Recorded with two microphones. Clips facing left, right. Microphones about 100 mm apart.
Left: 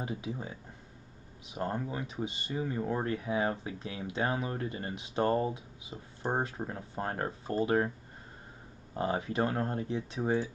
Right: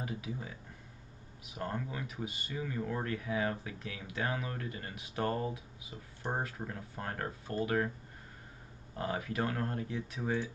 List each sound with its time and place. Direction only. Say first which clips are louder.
0.0 s speech: left 3 dB; 25° left (ahead or behind)
8.9 s speech: left 4 dB; 25° left (ahead or behind)